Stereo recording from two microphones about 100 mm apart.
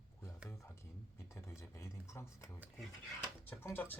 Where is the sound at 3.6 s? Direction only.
20° left (ahead or behind).